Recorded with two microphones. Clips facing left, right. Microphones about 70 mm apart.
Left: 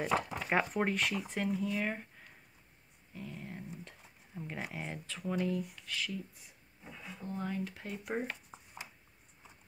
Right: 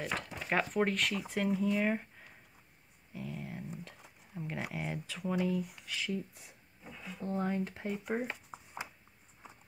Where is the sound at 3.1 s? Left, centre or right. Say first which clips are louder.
Right 3 dB; centre.